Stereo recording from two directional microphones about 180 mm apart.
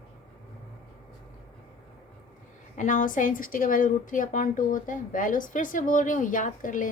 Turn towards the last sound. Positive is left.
turn(degrees=45)  # may be behind; listen again after turning